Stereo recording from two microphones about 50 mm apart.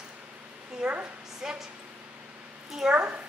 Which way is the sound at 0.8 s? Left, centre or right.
Right.